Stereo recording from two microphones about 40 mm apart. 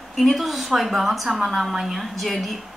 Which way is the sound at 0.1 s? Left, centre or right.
Centre.